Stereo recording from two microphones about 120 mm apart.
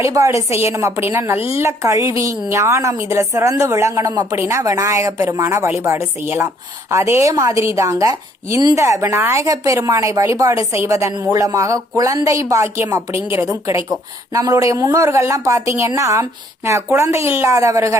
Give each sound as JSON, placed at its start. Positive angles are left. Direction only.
{"t": 0.0, "sound": "speech", "side_deg": -25}